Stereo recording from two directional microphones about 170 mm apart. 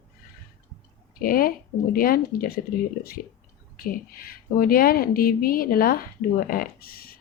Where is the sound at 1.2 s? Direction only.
60° left (ahead or behind).